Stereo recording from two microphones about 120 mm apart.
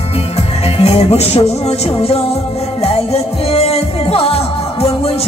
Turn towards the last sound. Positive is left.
turn(degrees=55)  # may be behind; listen again after turning